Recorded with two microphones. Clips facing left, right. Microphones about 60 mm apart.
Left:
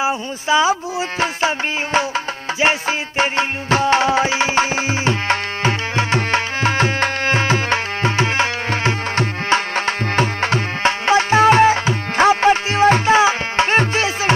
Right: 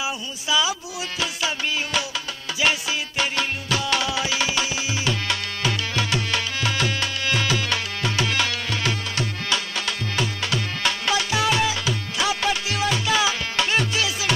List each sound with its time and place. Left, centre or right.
0.0 s music: left